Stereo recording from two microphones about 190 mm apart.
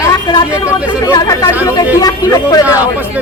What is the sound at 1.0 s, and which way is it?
Speech, 20° left (ahead or behind).